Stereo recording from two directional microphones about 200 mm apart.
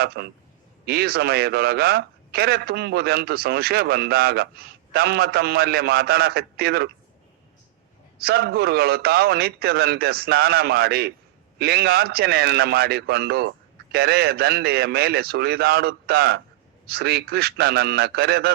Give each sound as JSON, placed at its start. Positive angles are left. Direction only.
{"t": 0.2, "sound": "a man's voice", "side_deg": -55}
{"t": 8.2, "sound": "a man's voice", "side_deg": -50}